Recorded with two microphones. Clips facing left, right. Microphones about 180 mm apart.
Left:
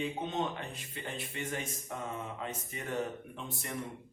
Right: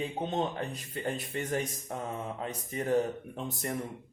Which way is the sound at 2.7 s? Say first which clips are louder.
Right 9 dB; 40° right (ahead or behind).